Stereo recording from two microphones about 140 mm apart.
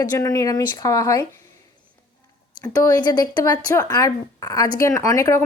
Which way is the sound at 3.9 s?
25° left (ahead or behind).